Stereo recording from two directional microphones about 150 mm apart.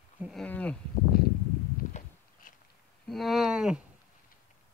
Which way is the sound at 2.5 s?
65° left (ahead or behind).